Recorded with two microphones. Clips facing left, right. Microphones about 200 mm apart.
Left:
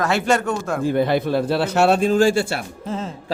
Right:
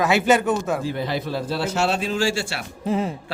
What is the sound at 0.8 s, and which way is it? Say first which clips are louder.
Speech: left 7 dB; 55° left (ahead or behind).